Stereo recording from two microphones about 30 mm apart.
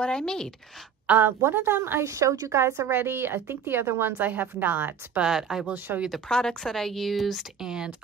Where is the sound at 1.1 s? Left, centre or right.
Right.